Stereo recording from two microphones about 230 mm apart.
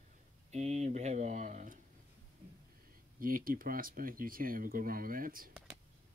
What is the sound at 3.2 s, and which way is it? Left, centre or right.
Speech, right.